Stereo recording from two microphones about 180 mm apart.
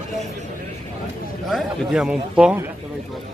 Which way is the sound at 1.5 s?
Centre (ahead or behind).